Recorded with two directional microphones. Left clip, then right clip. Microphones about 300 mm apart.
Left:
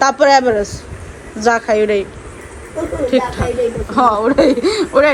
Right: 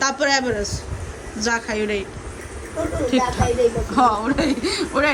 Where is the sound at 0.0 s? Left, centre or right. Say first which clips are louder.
Left 9 dB; centre.